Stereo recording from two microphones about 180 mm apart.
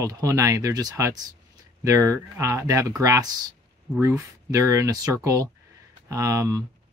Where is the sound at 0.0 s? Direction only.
20° right (ahead or behind).